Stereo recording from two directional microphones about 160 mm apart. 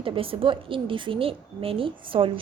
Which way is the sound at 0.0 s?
35° right (ahead or behind).